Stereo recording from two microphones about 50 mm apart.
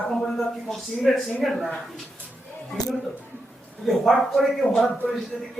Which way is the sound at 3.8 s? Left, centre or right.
Centre.